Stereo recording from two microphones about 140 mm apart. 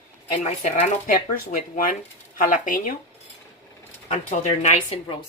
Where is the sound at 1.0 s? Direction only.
65° left (ahead or behind).